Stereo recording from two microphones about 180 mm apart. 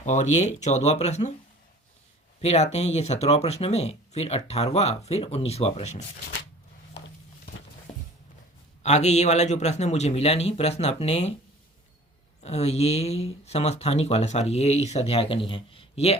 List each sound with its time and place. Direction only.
0.0 s speech: 40° left (ahead or behind)
2.4 s speech: 35° left (ahead or behind)
7.9 s a sound: 35° left (ahead or behind)
8.8 s speech: 40° left (ahead or behind)
12.4 s speech: 35° left (ahead or behind)